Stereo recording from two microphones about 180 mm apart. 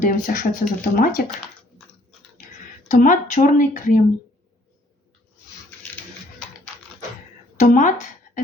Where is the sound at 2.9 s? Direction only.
45° left (ahead or behind).